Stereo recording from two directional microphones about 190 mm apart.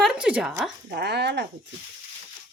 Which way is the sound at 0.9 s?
60° right (ahead or behind).